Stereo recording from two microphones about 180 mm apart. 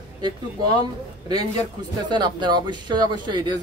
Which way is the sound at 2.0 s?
25° right (ahead or behind).